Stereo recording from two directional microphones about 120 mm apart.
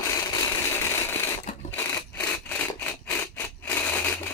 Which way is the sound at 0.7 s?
20° left (ahead or behind).